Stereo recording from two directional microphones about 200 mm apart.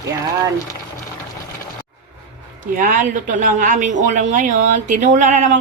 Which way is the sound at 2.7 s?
40° right (ahead or behind).